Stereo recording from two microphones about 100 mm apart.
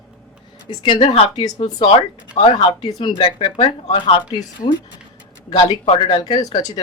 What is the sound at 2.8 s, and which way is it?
Speech, 45° left (ahead or behind).